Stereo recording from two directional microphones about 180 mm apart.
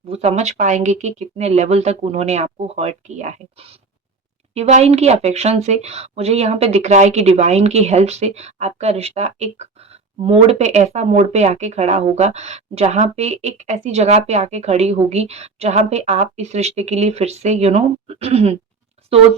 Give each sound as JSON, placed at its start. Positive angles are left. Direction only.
{"t": 0.1, "sound": "speech", "side_deg": -35}